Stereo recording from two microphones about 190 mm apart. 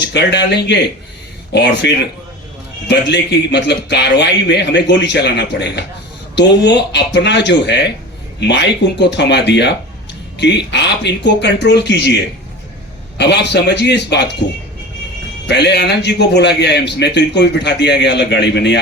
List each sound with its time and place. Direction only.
0.1 s a man's voice: 65° left (ahead or behind)
15.4 s a man's voice: 60° left (ahead or behind)